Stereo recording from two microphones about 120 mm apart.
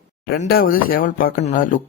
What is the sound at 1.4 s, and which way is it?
Speech, 90° left.